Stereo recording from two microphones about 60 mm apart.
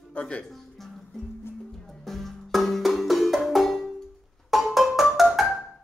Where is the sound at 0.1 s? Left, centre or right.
Centre.